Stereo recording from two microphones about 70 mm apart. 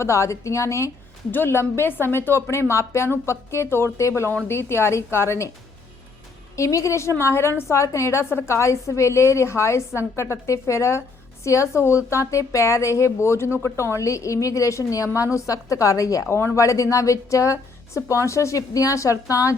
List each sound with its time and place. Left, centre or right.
0.0 s a woman's voice: left
1.3 s a woman's voice: left
6.6 s a woman's voice: left